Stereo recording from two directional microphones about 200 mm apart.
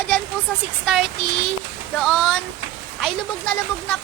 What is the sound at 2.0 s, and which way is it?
Speech, centre (ahead or behind).